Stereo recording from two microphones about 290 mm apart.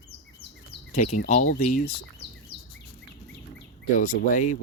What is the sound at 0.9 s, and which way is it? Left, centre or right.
Speech, left.